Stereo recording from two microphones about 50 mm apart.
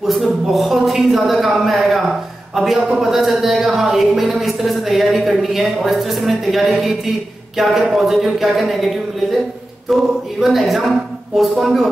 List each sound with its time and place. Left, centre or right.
0.0 s speech: centre